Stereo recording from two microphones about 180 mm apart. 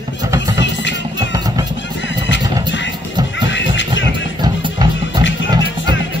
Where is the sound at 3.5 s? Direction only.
90° left.